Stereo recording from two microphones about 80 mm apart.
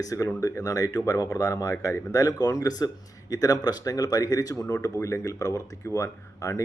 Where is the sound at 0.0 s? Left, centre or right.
Left.